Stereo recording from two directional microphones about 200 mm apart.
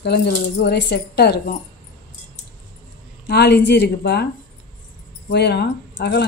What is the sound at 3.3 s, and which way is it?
A woman's voice, 55° left (ahead or behind).